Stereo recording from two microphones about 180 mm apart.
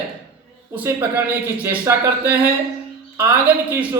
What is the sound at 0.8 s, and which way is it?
A man's voice, 10° right (ahead or behind).